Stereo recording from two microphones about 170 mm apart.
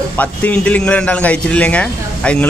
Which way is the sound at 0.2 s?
10° left (ahead or behind).